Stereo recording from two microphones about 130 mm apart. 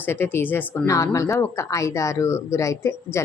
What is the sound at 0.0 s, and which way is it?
Speech, 15° left (ahead or behind).